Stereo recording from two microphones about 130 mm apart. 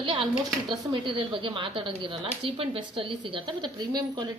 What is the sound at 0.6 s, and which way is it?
Speech, 40° right (ahead or behind).